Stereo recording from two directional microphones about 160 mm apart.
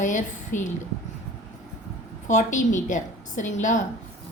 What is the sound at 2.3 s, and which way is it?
A woman's voice, 50° left (ahead or behind).